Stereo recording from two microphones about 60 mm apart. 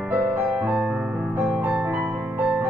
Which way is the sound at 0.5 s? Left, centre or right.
Centre.